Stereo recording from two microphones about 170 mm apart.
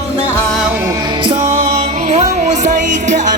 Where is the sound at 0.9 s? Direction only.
25° right (ahead or behind).